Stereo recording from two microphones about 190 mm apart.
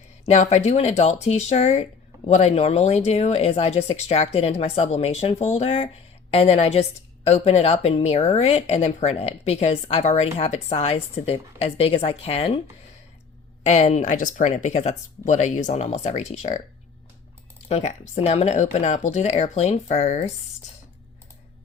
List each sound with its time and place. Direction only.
0.3 s speech: 35° left (ahead or behind)
13.7 s speech: 35° left (ahead or behind)
17.7 s speech: 35° left (ahead or behind)